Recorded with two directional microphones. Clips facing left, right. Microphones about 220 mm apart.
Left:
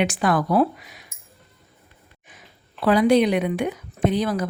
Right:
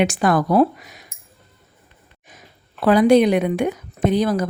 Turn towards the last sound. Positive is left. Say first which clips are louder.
# right 3 dB
turn(degrees=-40)  # may be behind; listen again after turning